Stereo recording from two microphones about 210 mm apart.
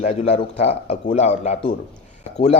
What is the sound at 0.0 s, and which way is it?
Speech, 30° left (ahead or behind).